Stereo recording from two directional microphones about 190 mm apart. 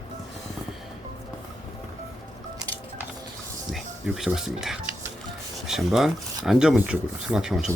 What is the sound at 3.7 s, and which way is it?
Speech, centre (ahead or behind).